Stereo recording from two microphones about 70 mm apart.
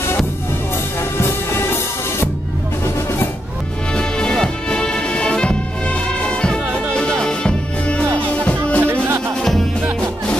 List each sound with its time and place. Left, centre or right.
1.1 s music: left
3.9 s music: centre
9.9 s music: centre